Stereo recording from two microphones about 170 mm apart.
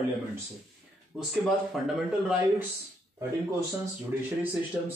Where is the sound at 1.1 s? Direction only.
Centre (ahead or behind).